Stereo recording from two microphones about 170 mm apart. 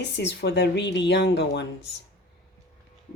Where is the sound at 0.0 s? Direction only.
90° left.